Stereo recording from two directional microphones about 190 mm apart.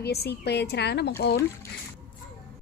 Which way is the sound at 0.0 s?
60° left (ahead or behind).